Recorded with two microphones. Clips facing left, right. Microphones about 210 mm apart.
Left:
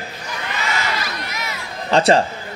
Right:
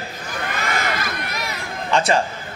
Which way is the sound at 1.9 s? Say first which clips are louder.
Left 4 dB; 35° left (ahead or behind).